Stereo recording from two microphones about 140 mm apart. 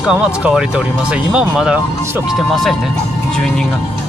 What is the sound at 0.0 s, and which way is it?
Speech, 5° right (ahead or behind).